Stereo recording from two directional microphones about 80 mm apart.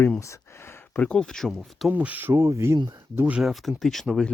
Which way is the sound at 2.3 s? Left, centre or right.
Right.